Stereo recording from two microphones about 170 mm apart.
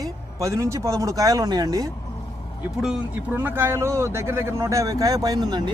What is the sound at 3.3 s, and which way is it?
Speech, 10° right (ahead or behind).